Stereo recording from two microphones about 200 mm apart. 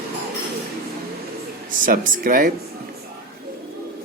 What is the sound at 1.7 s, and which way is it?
Speech, 45° right (ahead or behind).